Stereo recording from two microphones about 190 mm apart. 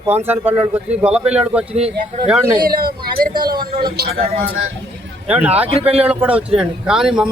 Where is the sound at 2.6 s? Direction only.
50° right (ahead or behind).